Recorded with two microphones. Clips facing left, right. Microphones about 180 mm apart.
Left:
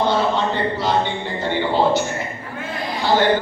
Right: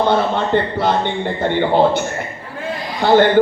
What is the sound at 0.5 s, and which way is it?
Speech, 55° right (ahead or behind).